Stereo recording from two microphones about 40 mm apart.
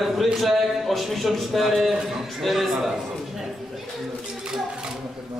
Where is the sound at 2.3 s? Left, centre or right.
Centre.